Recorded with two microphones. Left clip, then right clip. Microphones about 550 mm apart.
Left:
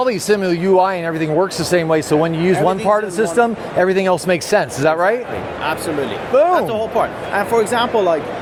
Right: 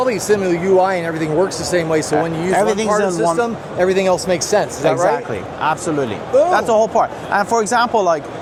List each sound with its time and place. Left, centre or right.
0.0 s speech: left
6.5 s speech: right